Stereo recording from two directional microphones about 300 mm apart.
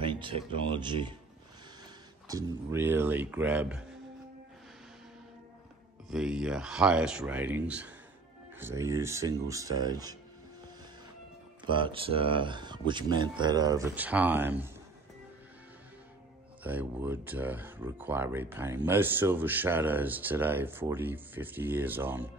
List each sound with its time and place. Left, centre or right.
0.0 s music: centre
0.7 s speech: centre
2.2 s speech: centre
6.0 s speech: centre
11.6 s speech: centre
16.6 s speech: centre